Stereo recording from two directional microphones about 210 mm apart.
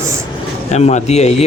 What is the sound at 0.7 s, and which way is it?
Speech, 30° left (ahead or behind).